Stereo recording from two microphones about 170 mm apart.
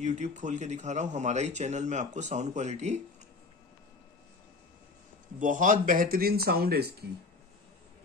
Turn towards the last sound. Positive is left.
turn(degrees=-65)  # may be behind; listen again after turning